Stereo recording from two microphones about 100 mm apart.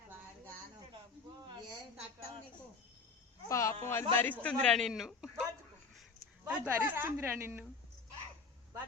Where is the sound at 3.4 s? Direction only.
30° left (ahead or behind); by 5.3 s centre (ahead or behind).